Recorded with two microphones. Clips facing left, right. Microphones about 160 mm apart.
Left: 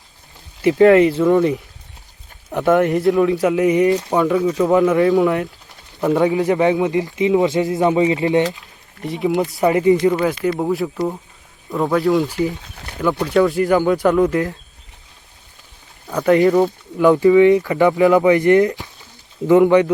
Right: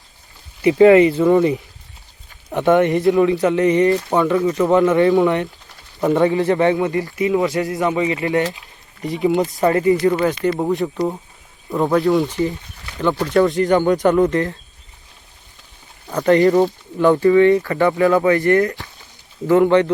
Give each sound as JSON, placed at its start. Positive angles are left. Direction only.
{"t": 0.6, "sound": "a man's voice", "side_deg": 0}
{"t": 9.0, "sound": "speech", "side_deg": 0}
{"t": 9.6, "sound": "speech", "side_deg": 15}
{"t": 10.1, "sound": "speech", "side_deg": 5}
{"t": 13.2, "sound": "speech", "side_deg": 5}
{"t": 16.0, "sound": "speech", "side_deg": 0}
{"t": 17.0, "sound": "speech", "side_deg": 10}